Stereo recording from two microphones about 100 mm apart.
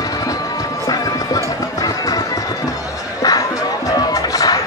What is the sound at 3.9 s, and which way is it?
Music, 40° left (ahead or behind).